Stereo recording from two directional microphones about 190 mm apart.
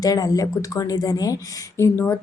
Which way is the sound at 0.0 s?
20° left (ahead or behind).